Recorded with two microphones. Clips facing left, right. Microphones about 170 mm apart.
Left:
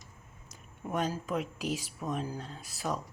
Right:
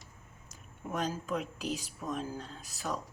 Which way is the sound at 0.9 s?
5° left (ahead or behind).